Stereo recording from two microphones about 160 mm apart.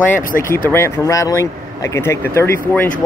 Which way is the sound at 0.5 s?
15° left (ahead or behind).